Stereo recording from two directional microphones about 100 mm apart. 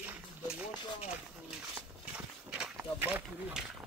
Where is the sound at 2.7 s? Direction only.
20° right (ahead or behind).